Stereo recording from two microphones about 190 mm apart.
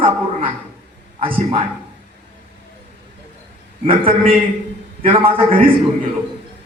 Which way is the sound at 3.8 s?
30° right (ahead or behind).